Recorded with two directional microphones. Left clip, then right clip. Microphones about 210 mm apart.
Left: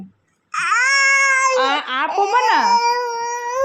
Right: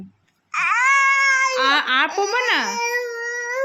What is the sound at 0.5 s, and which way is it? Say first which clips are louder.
Baby cry: left 1 dB; 20° right (ahead or behind).